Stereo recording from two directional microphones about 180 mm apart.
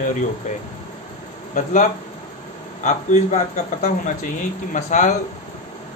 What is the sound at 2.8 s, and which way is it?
A man's voice, 40° left (ahead or behind).